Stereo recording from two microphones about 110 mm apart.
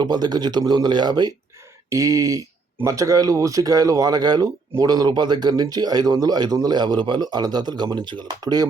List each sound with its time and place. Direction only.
0.0 s speech: 40° right (ahead or behind)
1.9 s speech: 30° right (ahead or behind)